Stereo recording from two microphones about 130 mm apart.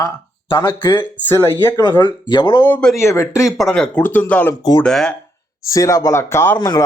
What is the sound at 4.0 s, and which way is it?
Speech, 15° left (ahead or behind).